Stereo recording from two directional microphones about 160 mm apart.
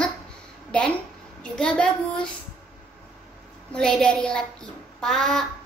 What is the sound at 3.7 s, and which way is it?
A child's voice, 5° left (ahead or behind).